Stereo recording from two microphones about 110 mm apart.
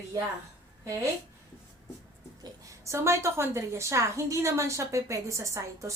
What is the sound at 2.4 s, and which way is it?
A woman's voice, 30° right (ahead or behind).